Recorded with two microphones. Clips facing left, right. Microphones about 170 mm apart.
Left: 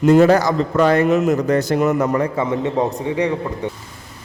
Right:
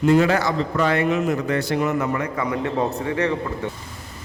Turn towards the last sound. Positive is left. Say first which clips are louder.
# left 3 dB
turn(degrees=15)  # may be behind; listen again after turning